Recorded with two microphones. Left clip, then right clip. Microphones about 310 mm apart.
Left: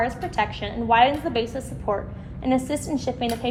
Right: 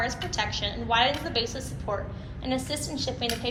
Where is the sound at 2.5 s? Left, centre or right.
Left.